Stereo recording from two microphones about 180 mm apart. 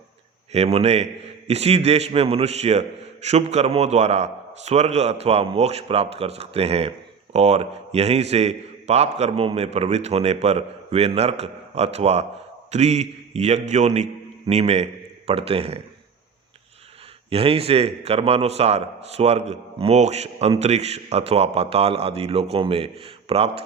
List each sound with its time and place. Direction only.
0.5 s a man's voice: 35° right (ahead or behind)
17.2 s a man's voice: 35° right (ahead or behind)